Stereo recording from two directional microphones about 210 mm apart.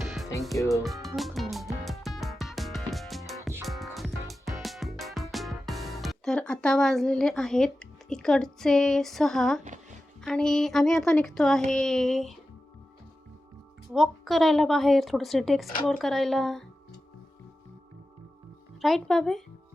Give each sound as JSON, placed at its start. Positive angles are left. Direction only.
{"t": 0.7, "sound": "speech", "side_deg": 0}
{"t": 1.0, "sound": "music", "side_deg": 0}
{"t": 10.2, "sound": "speech", "side_deg": 5}
{"t": 13.9, "sound": "speech", "side_deg": 0}
{"t": 18.8, "sound": "speech", "side_deg": 0}